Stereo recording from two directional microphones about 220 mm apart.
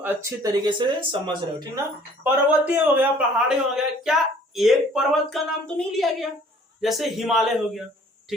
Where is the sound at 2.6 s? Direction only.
10° right (ahead or behind).